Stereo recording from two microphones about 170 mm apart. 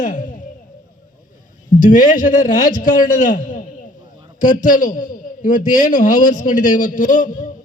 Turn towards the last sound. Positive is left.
turn(degrees=50)  # may be behind; listen again after turning